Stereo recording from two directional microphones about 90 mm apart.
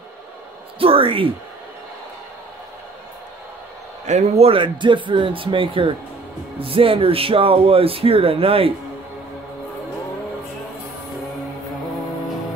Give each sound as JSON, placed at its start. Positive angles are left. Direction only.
{"t": 0.7, "sound": "speech", "side_deg": -90}
{"t": 4.4, "sound": "speech", "side_deg": -80}
{"t": 6.6, "sound": "speech", "side_deg": -90}